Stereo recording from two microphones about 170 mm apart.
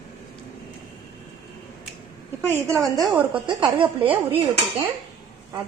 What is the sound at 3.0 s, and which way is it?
Speech, 10° right (ahead or behind).